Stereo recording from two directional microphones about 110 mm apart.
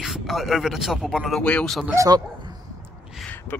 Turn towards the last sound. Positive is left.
turn(degrees=15)  # may be behind; listen again after turning